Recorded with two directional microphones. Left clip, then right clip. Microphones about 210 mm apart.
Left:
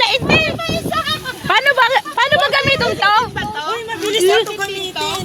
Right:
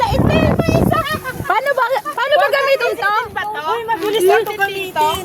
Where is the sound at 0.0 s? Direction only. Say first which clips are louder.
Left 2 dB; 45° left (ahead or behind).